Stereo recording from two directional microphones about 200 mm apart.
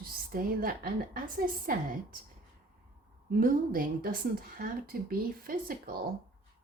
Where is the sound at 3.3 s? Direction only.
45° right (ahead or behind).